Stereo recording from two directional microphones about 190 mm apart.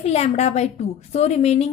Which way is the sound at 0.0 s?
35° left (ahead or behind).